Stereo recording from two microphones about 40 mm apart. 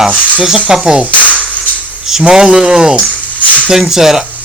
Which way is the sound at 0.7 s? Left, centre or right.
Centre.